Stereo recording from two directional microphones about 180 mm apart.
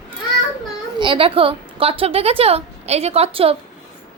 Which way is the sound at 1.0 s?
30° right (ahead or behind).